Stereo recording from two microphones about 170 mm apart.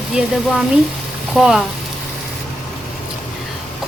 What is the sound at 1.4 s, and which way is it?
Speech, centre (ahead or behind).